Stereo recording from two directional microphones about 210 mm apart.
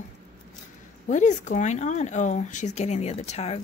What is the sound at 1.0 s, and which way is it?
Speech, 35° left (ahead or behind).